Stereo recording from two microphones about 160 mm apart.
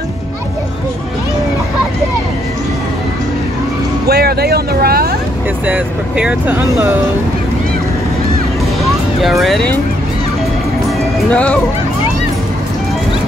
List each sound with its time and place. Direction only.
4.1 s vehicle: 75° right (ahead or behind)
5.7 s speech: 5° right (ahead or behind)
8.8 s music: centre (ahead or behind)
11.3 s speech: 5° left (ahead or behind)